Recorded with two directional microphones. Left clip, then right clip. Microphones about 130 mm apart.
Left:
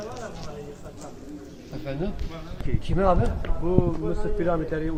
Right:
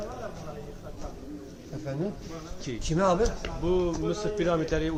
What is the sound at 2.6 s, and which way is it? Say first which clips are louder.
Speech: left 2 dB; 25° right (ahead or behind).